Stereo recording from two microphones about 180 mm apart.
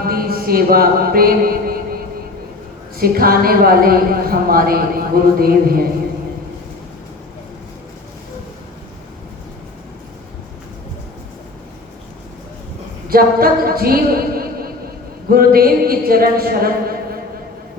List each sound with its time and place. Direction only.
0.0 s music: 55° right (ahead or behind)
2.9 s a woman's voice: 55° right (ahead or behind)
13.1 s a woman's voice: 55° right (ahead or behind)